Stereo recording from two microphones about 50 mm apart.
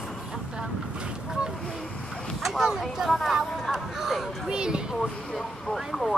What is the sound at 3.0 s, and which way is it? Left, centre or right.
Speech, centre.